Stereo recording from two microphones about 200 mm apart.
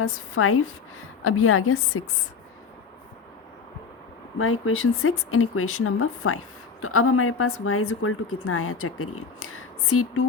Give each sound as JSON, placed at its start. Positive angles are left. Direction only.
{"t": 0.0, "sound": "a woman's voice", "side_deg": 90}
{"t": 4.4, "sound": "a woman's voice", "side_deg": 90}